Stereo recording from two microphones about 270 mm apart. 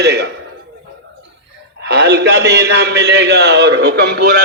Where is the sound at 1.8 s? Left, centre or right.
Right.